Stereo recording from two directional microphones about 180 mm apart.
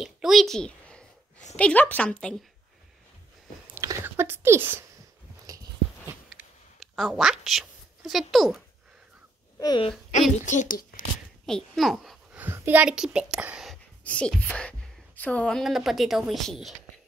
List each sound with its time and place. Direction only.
0.0 s a sound: centre (ahead or behind)
1.6 s a woman's voice: 10° left (ahead or behind)
3.7 s whispering: 15° right (ahead or behind)
5.5 s a sound: 20° right (ahead or behind)
6.8 s a woman's voice: centre (ahead or behind)
9.6 s speech: 25° left (ahead or behind)
10.4 s speech: 45° left (ahead or behind)
11.4 s a sound: centre (ahead or behind)
12.4 s a child's voice: 10° right (ahead or behind)
14.0 s speech: 5° left (ahead or behind)